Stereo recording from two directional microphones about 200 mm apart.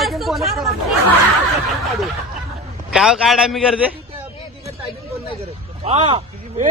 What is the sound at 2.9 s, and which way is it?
Speech, centre (ahead or behind).